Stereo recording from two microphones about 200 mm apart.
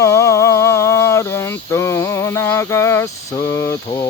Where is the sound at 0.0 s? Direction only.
15° left (ahead or behind).